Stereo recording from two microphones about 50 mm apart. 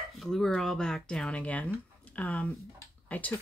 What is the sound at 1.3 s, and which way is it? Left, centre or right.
Speech, left.